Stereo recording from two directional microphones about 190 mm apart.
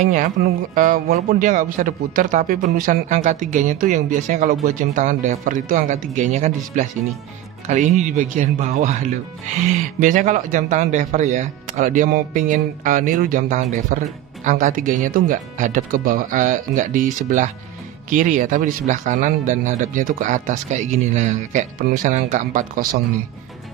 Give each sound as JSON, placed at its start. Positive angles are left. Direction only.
{"t": 0.0, "sound": "a man's voice", "side_deg": -40}